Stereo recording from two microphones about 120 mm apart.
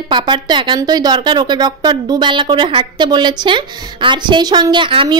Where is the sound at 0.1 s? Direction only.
40° right (ahead or behind).